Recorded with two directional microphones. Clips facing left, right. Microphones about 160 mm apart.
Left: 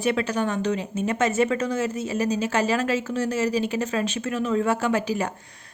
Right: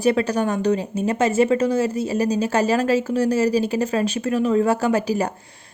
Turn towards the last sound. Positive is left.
turn(degrees=-35)  # may be behind; listen again after turning